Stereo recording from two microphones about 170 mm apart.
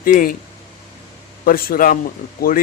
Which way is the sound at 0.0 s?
55° left (ahead or behind).